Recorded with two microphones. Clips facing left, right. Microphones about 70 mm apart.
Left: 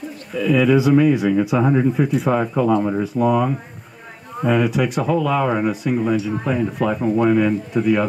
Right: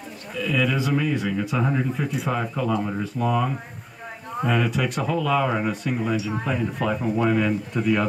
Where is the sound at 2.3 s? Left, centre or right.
Centre.